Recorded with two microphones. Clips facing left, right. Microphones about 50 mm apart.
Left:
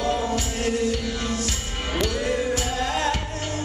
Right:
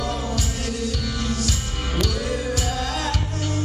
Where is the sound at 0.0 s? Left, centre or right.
Left.